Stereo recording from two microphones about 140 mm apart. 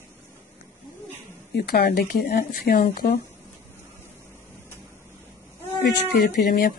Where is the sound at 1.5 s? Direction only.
90° left.